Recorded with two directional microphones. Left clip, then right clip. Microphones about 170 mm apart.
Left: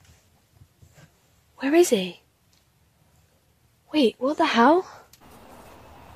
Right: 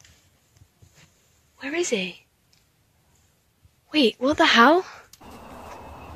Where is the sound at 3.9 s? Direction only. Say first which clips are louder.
Right 1 dB; 10° left (ahead or behind).